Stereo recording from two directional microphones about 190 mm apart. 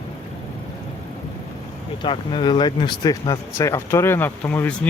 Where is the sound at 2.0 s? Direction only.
25° left (ahead or behind).